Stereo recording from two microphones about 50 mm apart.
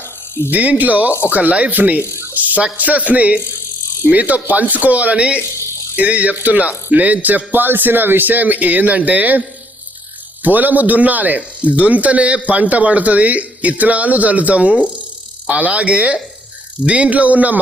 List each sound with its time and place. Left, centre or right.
0.5 s speech: right
2.3 s a sound: right
2.7 s speech: right
10.4 s speech: right